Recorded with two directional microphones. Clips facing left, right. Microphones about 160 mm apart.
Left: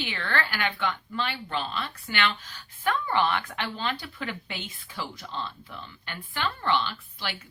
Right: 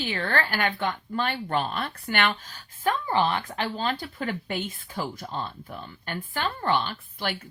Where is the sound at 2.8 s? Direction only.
35° right (ahead or behind).